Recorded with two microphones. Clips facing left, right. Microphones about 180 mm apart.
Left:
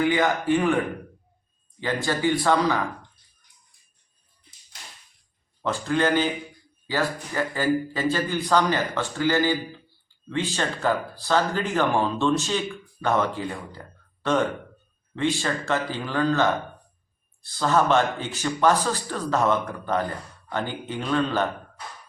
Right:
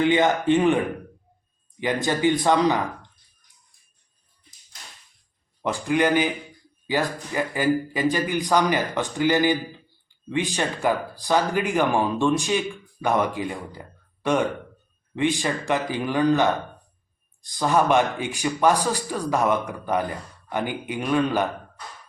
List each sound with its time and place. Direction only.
0.0 s a man's voice: 20° right (ahead or behind)
1.8 s a man's voice: 15° right (ahead or behind)
5.6 s speech: 15° right (ahead or behind)